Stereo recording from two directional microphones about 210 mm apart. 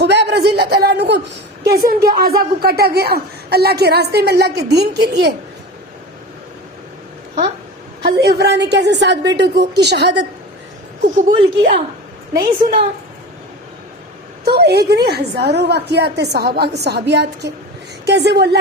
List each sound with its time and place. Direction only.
0.0 s a sound: 55° right (ahead or behind)
1.6 s a woman's voice: 45° right (ahead or behind)
8.0 s a woman's voice: 50° right (ahead or behind)
12.3 s a woman's voice: 25° right (ahead or behind)
14.4 s a woman's voice: 50° right (ahead or behind)